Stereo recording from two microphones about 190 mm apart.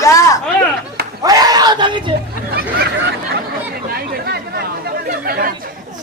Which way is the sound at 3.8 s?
50° right (ahead or behind).